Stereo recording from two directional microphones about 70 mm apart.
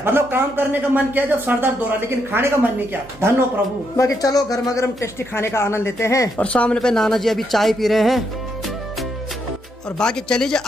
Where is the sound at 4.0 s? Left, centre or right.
Left.